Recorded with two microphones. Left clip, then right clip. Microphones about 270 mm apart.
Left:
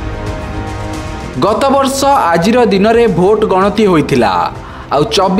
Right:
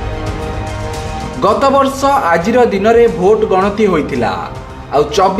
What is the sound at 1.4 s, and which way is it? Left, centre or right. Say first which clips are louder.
A man's voice: even; left.